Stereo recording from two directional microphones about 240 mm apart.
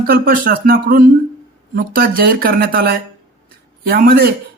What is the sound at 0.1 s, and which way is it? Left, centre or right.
Speech, right.